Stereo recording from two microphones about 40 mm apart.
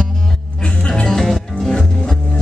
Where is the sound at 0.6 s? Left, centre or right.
Left.